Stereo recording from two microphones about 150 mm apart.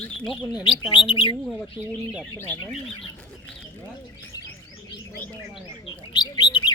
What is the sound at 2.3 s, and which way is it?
Speech, 15° left (ahead or behind).